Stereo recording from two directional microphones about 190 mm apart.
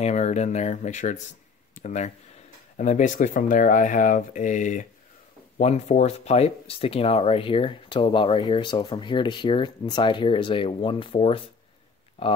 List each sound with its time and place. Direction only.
0.0 s speech: 35° left (ahead or behind)